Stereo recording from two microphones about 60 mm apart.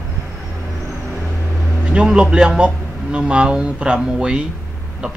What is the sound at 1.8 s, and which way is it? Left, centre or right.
Speech, centre.